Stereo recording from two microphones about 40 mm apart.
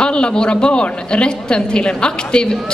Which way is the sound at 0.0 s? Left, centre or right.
Left.